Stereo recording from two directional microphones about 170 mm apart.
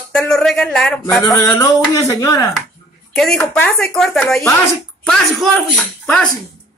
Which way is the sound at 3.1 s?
5° left (ahead or behind).